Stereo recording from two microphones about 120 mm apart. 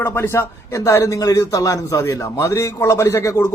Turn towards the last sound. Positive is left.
turn(degrees=25)  # may be behind; listen again after turning